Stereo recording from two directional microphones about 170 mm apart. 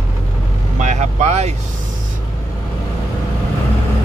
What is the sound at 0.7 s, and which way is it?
Vehicle, 40° right (ahead or behind).